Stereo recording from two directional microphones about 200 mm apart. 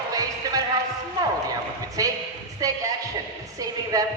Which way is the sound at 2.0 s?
15° right (ahead or behind).